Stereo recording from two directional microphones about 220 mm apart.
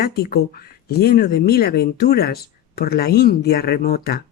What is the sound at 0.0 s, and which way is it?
Speech, 45° left (ahead or behind).